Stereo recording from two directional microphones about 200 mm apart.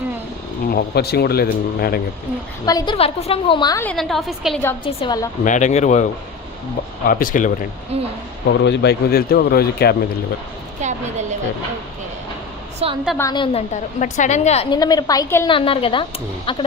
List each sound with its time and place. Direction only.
0.7 s speech: 50° left (ahead or behind)
2.6 s a woman's voice: 20° left (ahead or behind)
3.8 s a woman's voice: centre (ahead or behind)
4.9 s a woman's voice: 25° left (ahead or behind)
5.5 s a woman's voice: 35° left (ahead or behind)
7.1 s speech: 45° left (ahead or behind)
7.9 s speech: 30° right (ahead or behind)
8.4 s speech: 60° left (ahead or behind)
10.8 s a woman's voice: 35° right (ahead or behind)
12.8 s a woman's voice: 30° right (ahead or behind)
13.1 s a woman's voice: 20° left (ahead or behind)
14.7 s a woman's voice: 20° left (ahead or behind)
15.4 s a woman's voice: 25° left (ahead or behind)